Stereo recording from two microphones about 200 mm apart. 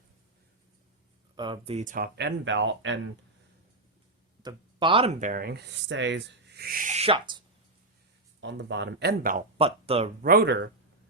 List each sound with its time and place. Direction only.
1.4 s speech: 25° right (ahead or behind)
2.1 s speech: 60° right (ahead or behind)
4.4 s speech: 25° right (ahead or behind)
5.3 s owl: 50° right (ahead or behind); by 7.4 s 25° right (ahead or behind)
8.4 s speech: 60° right (ahead or behind)
9.6 s speech: 30° right (ahead or behind)
10.2 s speech: 55° right (ahead or behind)